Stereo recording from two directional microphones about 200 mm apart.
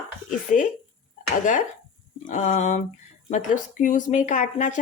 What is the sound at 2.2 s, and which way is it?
A woman's voice, 40° left (ahead or behind).